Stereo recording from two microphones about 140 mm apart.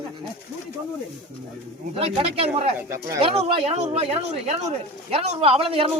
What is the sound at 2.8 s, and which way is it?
Speech, 20° right (ahead or behind).